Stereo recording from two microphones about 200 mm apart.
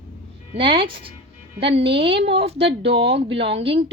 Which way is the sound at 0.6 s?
25° right (ahead or behind).